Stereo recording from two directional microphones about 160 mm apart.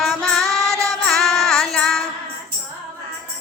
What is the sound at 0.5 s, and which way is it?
Child singing, 20° right (ahead or behind).